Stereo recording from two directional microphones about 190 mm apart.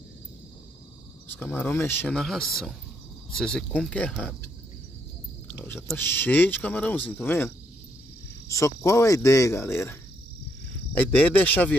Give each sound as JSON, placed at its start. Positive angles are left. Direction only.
{"t": 1.3, "sound": "speech", "side_deg": 10}
{"t": 5.9, "sound": "speech", "side_deg": 10}